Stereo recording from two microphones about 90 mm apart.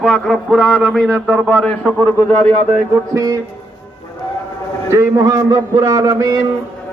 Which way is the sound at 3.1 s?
40° right (ahead or behind).